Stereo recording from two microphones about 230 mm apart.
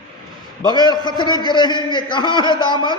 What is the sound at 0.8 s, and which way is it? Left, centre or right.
A man's voice, centre.